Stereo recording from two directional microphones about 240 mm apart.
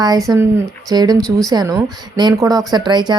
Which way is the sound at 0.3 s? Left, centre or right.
Centre.